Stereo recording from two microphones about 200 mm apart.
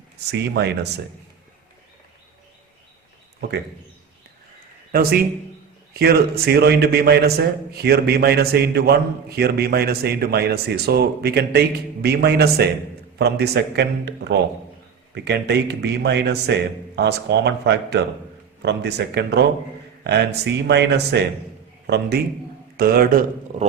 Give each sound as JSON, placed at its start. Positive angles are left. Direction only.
{"t": 0.3, "sound": "a man's voice", "side_deg": -55}
{"t": 4.9, "sound": "a man's voice", "side_deg": -50}